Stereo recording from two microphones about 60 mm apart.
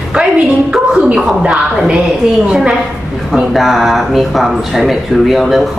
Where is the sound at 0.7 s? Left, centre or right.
Centre.